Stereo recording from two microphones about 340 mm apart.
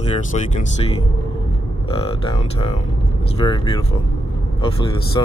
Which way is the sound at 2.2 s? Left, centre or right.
Centre.